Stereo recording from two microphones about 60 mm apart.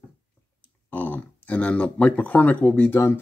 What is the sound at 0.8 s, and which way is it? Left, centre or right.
Speech, left.